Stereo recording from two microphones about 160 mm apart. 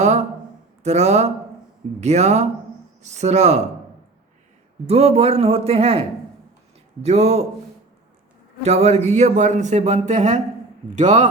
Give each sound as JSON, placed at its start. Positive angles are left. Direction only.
{"t": 0.0, "sound": "a sound", "side_deg": -45}
{"t": 0.8, "sound": "speech", "side_deg": -45}
{"t": 4.9, "sound": "speech", "side_deg": -40}
{"t": 8.6, "sound": "speech", "side_deg": -40}